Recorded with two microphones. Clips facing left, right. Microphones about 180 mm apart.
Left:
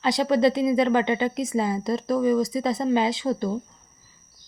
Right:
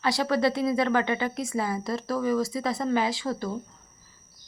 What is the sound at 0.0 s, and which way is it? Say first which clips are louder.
A woman's voice: left 4 dB; 20° left (ahead or behind).